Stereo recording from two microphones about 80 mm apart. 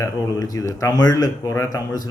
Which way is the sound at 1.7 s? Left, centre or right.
Left.